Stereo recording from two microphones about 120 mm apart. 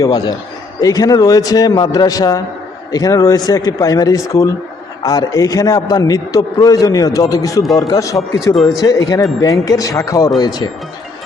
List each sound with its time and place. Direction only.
0.0 s a man's voice: 35° left (ahead or behind)